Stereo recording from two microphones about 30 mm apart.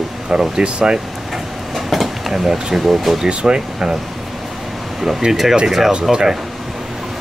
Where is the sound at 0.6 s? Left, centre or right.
Right.